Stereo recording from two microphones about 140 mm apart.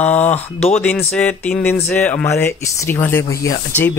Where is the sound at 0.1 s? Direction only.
10° left (ahead or behind).